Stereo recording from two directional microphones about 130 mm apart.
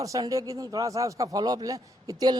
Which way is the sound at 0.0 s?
25° right (ahead or behind).